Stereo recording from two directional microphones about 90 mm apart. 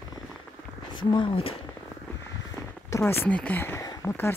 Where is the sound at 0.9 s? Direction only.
65° left (ahead or behind); by 1.6 s 80° left.